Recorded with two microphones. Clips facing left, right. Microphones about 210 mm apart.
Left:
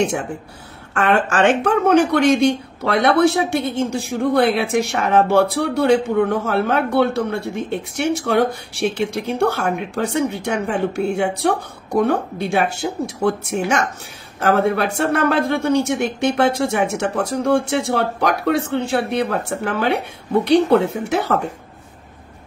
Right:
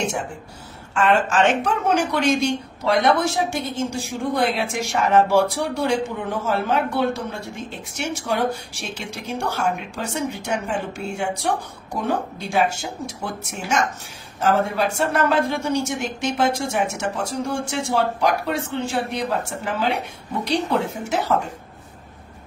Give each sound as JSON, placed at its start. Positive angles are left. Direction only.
{"t": 0.0, "sound": "speech", "side_deg": 60}
{"t": 14.4, "sound": "speech", "side_deg": 60}